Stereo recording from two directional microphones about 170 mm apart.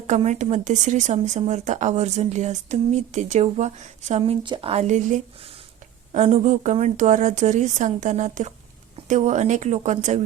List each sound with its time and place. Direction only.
0.1 s speech: 45° right (ahead or behind)
4.2 s speech: 30° right (ahead or behind); by 10.2 s 45° right (ahead or behind)